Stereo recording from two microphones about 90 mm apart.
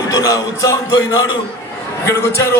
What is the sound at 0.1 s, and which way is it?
A man's voice, 40° left (ahead or behind).